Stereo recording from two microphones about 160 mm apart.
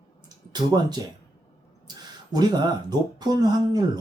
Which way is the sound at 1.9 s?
25° right (ahead or behind).